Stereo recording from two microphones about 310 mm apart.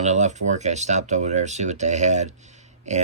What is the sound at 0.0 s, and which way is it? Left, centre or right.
Speech, right.